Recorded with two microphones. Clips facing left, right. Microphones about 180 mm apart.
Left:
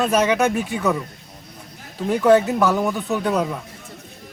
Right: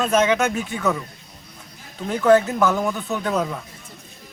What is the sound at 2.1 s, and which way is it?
Speech, 10° left (ahead or behind).